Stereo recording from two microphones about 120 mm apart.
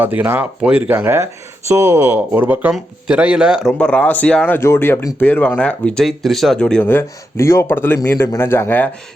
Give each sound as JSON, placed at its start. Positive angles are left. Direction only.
{"t": 0.0, "sound": "speech", "side_deg": -15}
{"t": 3.8, "sound": "speech", "side_deg": 10}